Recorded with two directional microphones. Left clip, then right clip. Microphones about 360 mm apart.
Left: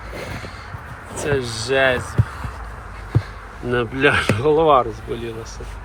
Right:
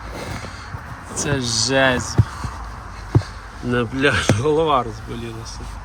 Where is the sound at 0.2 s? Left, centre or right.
Centre.